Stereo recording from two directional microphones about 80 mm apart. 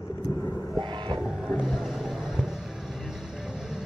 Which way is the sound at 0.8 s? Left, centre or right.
Right.